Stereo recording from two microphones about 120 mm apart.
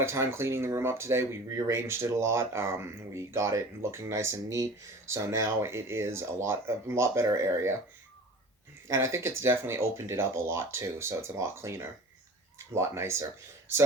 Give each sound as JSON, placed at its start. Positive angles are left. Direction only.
{"t": 0.0, "sound": "speech", "side_deg": -20}
{"t": 8.9, "sound": "speech", "side_deg": -25}